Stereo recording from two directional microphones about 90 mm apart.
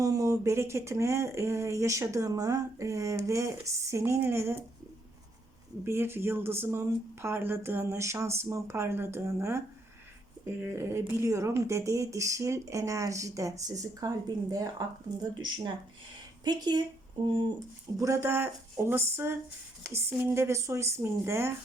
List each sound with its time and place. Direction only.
0.0 s speech: 35° right (ahead or behind)
5.8 s speech: 25° right (ahead or behind)
15.4 s speech: 60° right (ahead or behind)
17.9 s speech: 35° right (ahead or behind)